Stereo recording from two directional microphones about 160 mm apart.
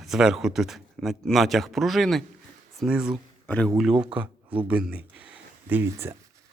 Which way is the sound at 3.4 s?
10° left (ahead or behind).